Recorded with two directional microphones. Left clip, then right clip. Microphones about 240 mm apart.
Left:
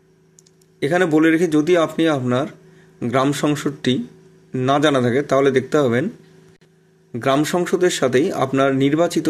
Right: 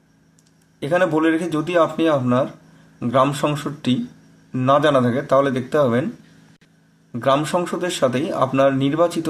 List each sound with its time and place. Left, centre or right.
0.7 s speech: left
7.1 s speech: left